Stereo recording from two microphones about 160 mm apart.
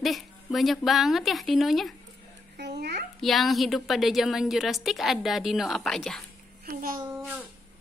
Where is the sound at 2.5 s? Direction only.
90° right.